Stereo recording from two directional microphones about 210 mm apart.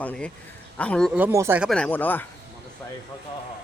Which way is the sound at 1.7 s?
5° left (ahead or behind).